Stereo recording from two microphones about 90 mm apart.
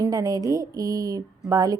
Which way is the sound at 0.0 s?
45° right (ahead or behind).